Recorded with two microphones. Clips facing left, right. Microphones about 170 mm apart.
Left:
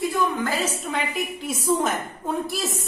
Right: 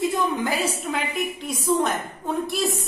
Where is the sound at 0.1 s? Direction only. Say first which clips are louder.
Even; 15° right (ahead or behind).